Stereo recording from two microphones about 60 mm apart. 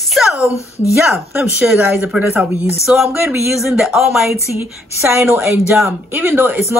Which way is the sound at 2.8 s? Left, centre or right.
Centre.